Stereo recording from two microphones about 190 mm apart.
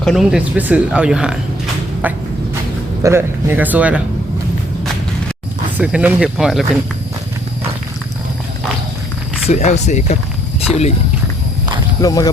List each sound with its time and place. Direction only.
0.0 s speech: centre (ahead or behind)
3.0 s speech: 15° right (ahead or behind)
5.7 s speech: 5° right (ahead or behind)
9.5 s speech: 35° left (ahead or behind)
12.0 s speech: 20° left (ahead or behind)